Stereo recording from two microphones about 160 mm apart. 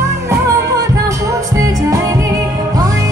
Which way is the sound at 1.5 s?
20° right (ahead or behind).